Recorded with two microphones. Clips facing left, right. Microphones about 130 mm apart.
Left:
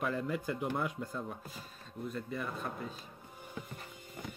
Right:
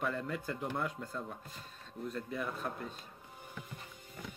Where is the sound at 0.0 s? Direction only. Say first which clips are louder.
Left 2 dB; 5° left (ahead or behind).